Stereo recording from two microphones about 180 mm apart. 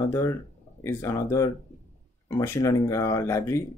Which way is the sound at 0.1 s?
15° left (ahead or behind).